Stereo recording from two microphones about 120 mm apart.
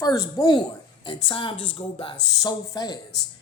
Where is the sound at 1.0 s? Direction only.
40° left (ahead or behind).